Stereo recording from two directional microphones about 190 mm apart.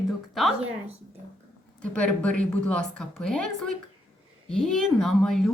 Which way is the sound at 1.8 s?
5° left (ahead or behind).